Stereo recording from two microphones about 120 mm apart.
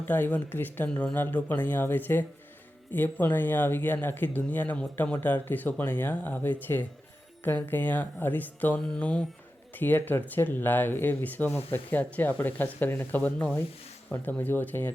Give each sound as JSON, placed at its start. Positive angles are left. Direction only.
{"t": 0.1, "sound": "speech", "side_deg": 15}